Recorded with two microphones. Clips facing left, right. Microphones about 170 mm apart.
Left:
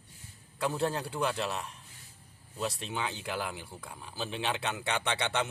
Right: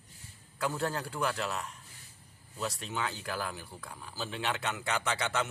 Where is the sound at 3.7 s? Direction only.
5° left (ahead or behind).